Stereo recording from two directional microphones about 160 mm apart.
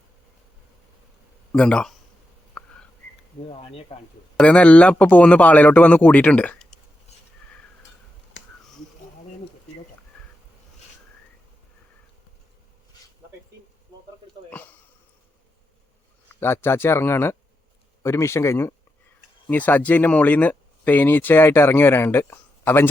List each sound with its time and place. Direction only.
1.5 s a man's voice: 5° left (ahead or behind)
2.6 s a sound: 5° left (ahead or behind)
3.5 s speech: 35° left (ahead or behind)
4.4 s speech: 5° left (ahead or behind)
14.5 s sniff: 10° left (ahead or behind)
16.3 s speech: 15° left (ahead or behind)